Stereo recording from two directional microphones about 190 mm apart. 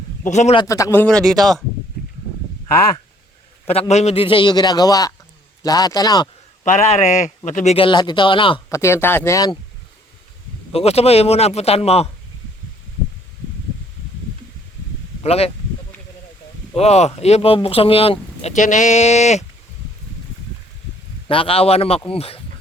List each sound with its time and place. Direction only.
0.3 s speech: 40° left (ahead or behind)
0.5 s speech: 20° left (ahead or behind); by 1.4 s centre (ahead or behind)
3.7 s a man's voice: 35° left (ahead or behind)
6.7 s a man's voice: 35° left (ahead or behind)
8.7 s speech: 15° left (ahead or behind)
10.7 s speech: 30° left (ahead or behind)
15.2 s speech: 30° left (ahead or behind)
16.7 s speech: 35° left (ahead or behind)
21.2 s speech: 30° left (ahead or behind)